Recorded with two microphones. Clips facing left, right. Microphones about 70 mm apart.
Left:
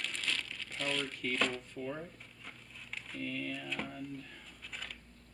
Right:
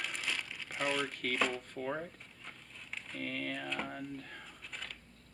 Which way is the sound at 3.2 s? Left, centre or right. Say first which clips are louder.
Right 1 dB; right.